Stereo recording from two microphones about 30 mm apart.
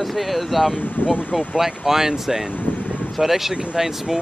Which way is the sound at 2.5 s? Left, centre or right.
Left.